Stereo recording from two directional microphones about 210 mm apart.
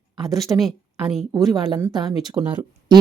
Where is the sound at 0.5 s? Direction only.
Centre (ahead or behind).